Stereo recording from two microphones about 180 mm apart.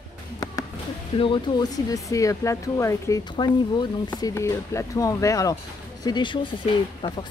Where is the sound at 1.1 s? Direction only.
30° left (ahead or behind).